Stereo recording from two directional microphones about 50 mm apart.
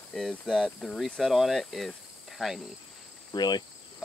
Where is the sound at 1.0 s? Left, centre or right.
Centre.